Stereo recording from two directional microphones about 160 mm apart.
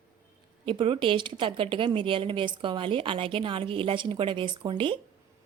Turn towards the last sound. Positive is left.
turn(degrees=-30)  # may be behind; listen again after turning